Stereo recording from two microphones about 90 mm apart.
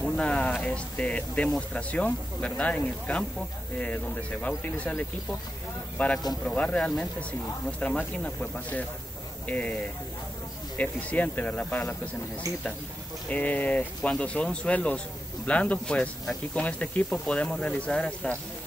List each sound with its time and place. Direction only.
0.0 s speech: 10° left (ahead or behind)
10.8 s speech: 15° left (ahead or behind)
12.4 s speech: 40° right (ahead or behind)
13.3 s speech: 20° left (ahead or behind)